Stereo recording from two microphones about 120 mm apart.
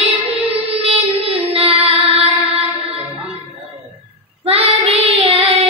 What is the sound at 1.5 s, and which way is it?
Music, 55° right (ahead or behind).